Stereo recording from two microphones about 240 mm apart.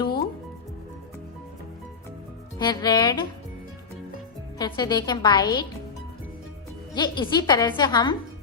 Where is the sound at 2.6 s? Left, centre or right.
Centre.